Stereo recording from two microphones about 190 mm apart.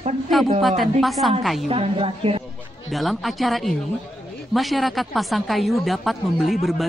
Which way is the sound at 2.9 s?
Centre (ahead or behind).